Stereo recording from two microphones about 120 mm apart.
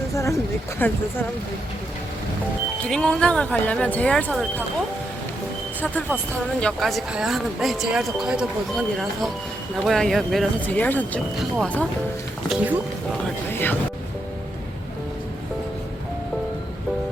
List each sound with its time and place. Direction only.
0.1 s a sound: 25° left (ahead or behind)
0.8 s speech: 15° left (ahead or behind)
2.8 s speech: 5° left (ahead or behind)
5.8 s speech: 15° left (ahead or behind)
10.7 s speech: 15° left (ahead or behind)
11.3 s speech: centre (ahead or behind)
13.5 s speech: 15° left (ahead or behind)